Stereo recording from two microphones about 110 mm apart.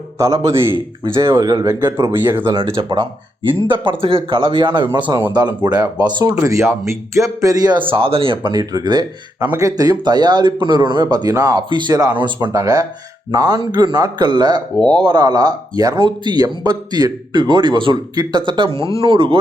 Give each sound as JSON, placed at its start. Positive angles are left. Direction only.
{"t": 0.2, "sound": "speech", "side_deg": -30}
{"t": 2.2, "sound": "speech", "side_deg": -20}
{"t": 2.5, "sound": "speech", "side_deg": -50}
{"t": 6.3, "sound": "speech", "side_deg": -25}
{"t": 7.8, "sound": "speech", "side_deg": -55}